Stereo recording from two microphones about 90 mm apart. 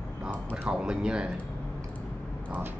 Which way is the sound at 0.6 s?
10° right (ahead or behind).